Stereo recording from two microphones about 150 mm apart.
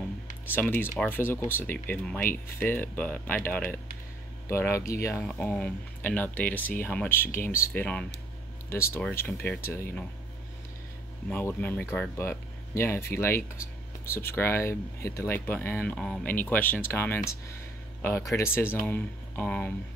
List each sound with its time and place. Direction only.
0.5 s speech: 15° left (ahead or behind)
5.1 s speech: 10° left (ahead or behind)
11.2 s speech: 10° left (ahead or behind)